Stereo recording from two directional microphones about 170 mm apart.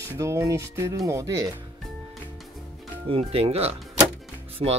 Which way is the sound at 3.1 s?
35° right (ahead or behind).